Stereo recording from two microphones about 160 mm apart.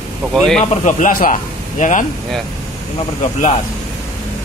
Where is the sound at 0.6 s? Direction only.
50° left (ahead or behind).